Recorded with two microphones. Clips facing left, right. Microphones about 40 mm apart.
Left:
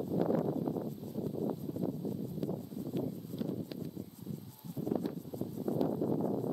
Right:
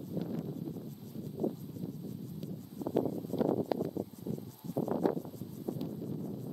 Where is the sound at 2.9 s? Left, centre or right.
Centre.